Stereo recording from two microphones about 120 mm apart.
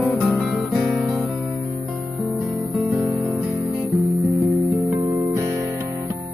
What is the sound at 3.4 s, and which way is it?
Music, 20° right (ahead or behind).